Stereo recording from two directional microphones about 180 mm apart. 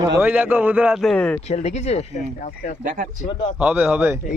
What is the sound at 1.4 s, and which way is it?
Speech, 40° left (ahead or behind).